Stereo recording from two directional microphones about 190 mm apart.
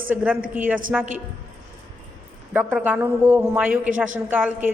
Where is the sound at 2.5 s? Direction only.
10° right (ahead or behind).